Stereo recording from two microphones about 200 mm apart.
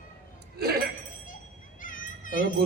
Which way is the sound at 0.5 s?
50° right (ahead or behind).